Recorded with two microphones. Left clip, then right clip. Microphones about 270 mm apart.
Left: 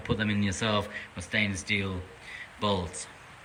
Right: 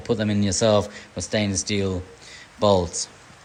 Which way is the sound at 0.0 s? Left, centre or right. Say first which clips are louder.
Right 6 dB; centre.